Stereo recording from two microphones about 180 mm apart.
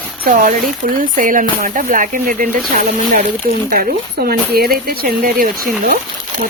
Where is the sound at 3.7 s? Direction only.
55° right (ahead or behind).